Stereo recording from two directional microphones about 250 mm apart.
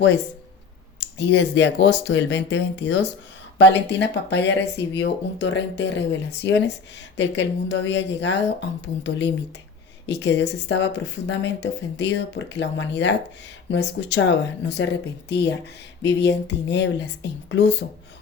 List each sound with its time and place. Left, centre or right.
0.9 s speech: left